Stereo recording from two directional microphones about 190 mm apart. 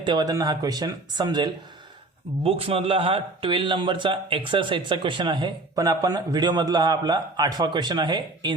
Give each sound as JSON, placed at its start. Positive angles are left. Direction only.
{"t": 0.0, "sound": "speech", "side_deg": -25}